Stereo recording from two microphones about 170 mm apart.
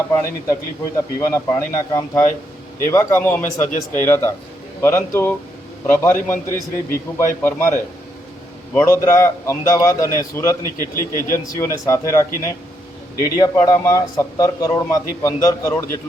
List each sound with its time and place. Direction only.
0.2 s a man's voice: 20° left (ahead or behind)